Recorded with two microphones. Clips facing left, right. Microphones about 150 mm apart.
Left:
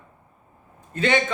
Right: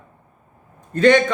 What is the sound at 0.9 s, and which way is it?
Speech, 45° right (ahead or behind).